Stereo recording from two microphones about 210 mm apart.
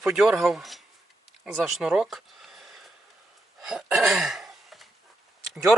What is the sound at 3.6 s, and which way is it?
Throat clearing, centre (ahead or behind).